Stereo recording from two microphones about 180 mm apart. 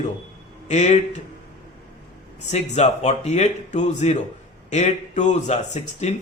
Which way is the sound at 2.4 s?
40° left (ahead or behind).